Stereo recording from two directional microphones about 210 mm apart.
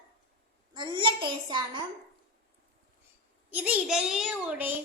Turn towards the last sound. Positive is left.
turn(degrees=-5)  # may be behind; listen again after turning